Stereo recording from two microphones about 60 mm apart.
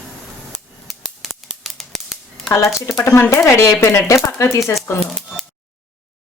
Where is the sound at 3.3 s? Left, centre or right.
Left.